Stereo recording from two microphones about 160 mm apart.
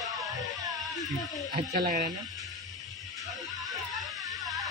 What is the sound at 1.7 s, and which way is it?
Speech, 65° right (ahead or behind).